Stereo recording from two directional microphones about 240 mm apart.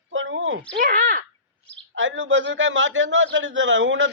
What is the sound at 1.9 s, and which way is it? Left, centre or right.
A woman's voice, right.